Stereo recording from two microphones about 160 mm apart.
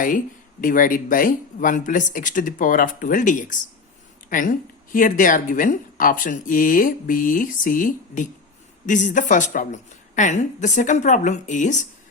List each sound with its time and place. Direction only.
0.6 s a woman's voice: 60° left (ahead or behind)